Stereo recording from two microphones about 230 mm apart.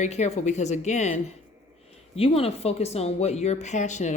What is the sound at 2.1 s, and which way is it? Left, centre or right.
Speech, left.